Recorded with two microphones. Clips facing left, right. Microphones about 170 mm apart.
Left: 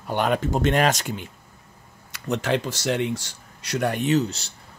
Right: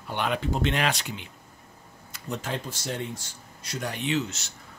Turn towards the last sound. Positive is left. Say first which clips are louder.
# left 6 dB
turn(degrees=35)  # may be behind; listen again after turning